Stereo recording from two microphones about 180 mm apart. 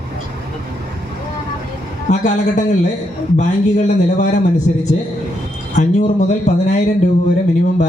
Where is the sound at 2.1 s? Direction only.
40° left (ahead or behind).